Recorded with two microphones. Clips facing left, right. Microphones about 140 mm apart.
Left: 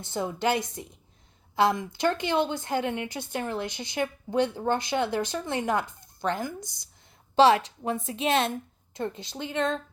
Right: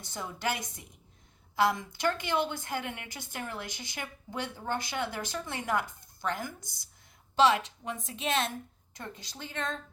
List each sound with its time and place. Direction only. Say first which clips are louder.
0.0 s speech: left 7 dB; 25° left (ahead or behind)
7.3 s speech: left 5 dB; 35° left (ahead or behind)